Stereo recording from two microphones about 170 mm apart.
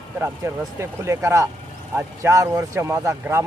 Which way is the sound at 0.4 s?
15° right (ahead or behind).